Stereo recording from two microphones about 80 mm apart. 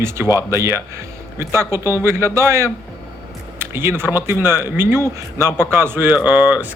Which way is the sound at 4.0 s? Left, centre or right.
Right.